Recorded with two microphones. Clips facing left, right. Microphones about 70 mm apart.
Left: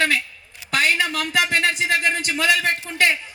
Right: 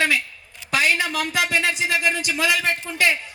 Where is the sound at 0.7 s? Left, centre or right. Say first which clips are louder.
Even; left.